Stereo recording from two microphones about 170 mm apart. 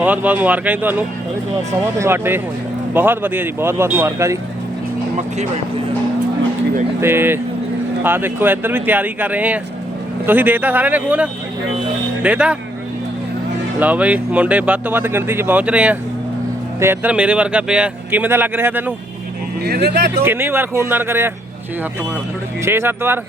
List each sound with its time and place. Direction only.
0.0 s speech: 10° right (ahead or behind)
7.0 s speech: 15° right (ahead or behind)
13.7 s speech: 10° right (ahead or behind)
19.6 s speech: 65° right (ahead or behind)
20.2 s speech: 15° right (ahead or behind)
22.6 s speech: 15° right (ahead or behind)